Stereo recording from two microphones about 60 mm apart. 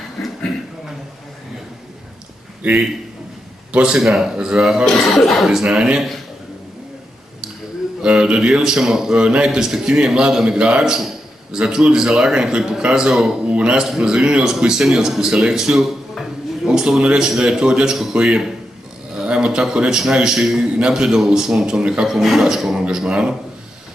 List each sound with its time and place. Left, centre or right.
3.7 s a man's voice: centre
4.0 s speech: centre
5.5 s a man's voice: centre
8.0 s a man's voice: centre
13.1 s speech: centre
13.5 s a man's voice: centre
22.1 s a man's voice: centre